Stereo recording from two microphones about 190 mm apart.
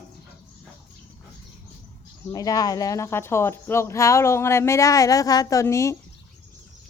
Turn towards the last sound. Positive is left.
turn(degrees=15)  # may be behind; listen again after turning